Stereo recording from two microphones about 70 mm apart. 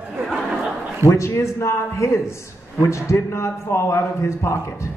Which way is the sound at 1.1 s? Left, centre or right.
Left.